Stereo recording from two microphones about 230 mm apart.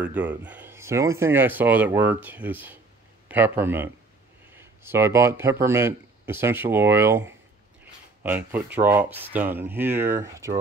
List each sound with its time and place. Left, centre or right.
0.0 s speech: centre